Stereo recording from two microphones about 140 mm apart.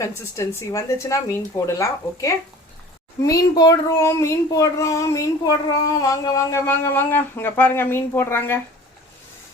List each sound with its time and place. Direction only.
0.0 s speech: 20° left (ahead or behind)